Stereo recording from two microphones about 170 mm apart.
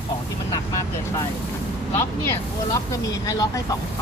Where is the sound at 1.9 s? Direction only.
15° left (ahead or behind).